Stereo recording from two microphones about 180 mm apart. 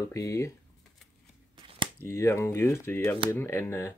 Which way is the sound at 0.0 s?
15° left (ahead or behind).